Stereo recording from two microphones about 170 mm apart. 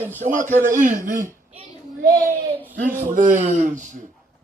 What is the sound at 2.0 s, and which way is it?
A child's voice, 55° right (ahead or behind).